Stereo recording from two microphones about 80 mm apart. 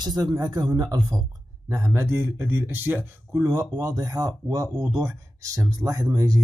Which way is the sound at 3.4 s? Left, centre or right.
Right.